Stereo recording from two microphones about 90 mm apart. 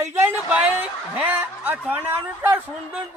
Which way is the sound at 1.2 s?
20° right (ahead or behind).